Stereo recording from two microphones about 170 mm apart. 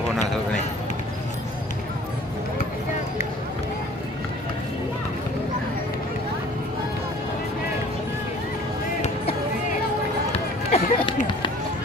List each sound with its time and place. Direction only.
10.3 s run: 35° left (ahead or behind)